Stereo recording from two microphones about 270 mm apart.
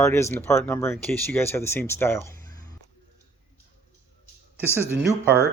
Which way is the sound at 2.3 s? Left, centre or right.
Right.